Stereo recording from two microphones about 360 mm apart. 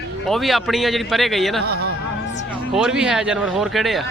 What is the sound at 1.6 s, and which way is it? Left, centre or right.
Speech, right.